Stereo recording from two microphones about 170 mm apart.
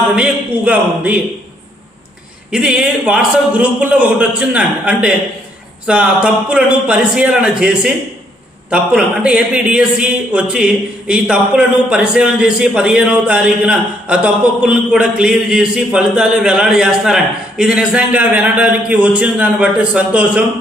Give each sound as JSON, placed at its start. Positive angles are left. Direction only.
{"t": 0.2, "sound": "a man's voice", "side_deg": -5}
{"t": 2.5, "sound": "a man's voice", "side_deg": -5}